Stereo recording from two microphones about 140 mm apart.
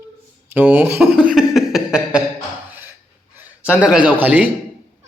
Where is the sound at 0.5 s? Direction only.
15° right (ahead or behind).